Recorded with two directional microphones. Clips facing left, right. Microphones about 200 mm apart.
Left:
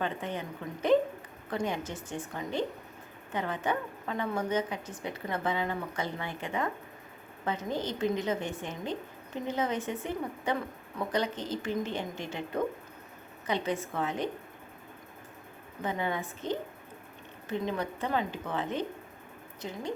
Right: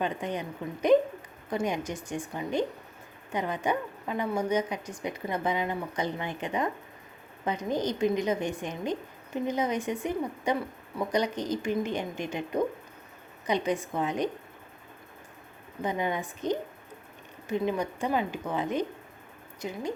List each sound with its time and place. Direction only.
0.0 s a woman's voice: 15° right (ahead or behind)
15.8 s a woman's voice: 15° right (ahead or behind)